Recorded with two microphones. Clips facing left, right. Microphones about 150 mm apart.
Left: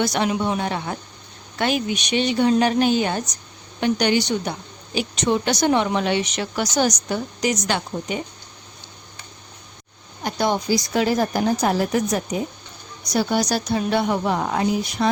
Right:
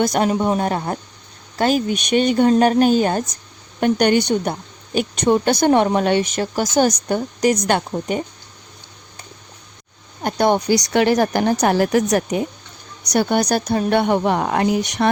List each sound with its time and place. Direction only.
0.0 s speech: 45° right (ahead or behind)
10.2 s a woman's voice: 55° right (ahead or behind); by 12.5 s 75° right (ahead or behind)
13.1 s speech: 55° right (ahead or behind)